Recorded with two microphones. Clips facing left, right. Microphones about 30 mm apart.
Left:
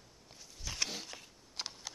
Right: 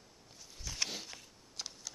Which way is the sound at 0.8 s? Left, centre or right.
Centre.